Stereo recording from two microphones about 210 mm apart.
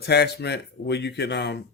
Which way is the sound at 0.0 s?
50° left (ahead or behind).